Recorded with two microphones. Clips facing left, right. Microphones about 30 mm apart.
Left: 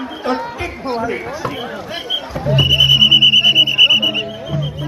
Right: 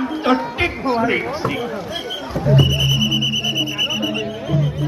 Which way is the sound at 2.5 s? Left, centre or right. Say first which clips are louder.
Left 6 dB; left.